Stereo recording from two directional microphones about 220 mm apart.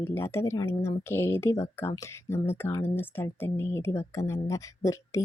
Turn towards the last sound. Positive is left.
turn(degrees=15)  # may be behind; listen again after turning